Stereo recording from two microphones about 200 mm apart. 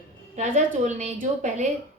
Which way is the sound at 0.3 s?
35° right (ahead or behind).